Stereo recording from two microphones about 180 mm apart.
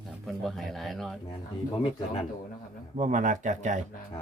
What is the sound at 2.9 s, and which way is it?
Speech, 40° right (ahead or behind).